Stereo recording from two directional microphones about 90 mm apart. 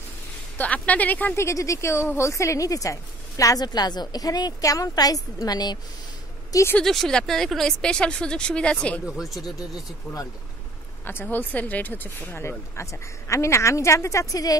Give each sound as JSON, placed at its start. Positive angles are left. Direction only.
{"t": 0.6, "sound": "speech", "side_deg": 15}
{"t": 1.4, "sound": "speech", "side_deg": 35}
{"t": 6.8, "sound": "speech", "side_deg": 5}
{"t": 9.0, "sound": "speech", "side_deg": 0}
{"t": 9.4, "sound": "speech", "side_deg": 45}
{"t": 11.1, "sound": "speech", "side_deg": 20}